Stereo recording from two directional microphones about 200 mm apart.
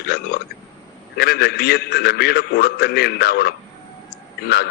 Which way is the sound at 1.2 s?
55° left (ahead or behind).